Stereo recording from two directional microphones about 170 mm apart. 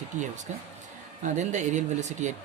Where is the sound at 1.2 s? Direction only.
45° right (ahead or behind).